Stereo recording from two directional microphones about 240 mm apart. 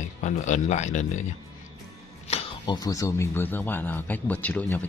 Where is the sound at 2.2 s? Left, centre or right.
Left.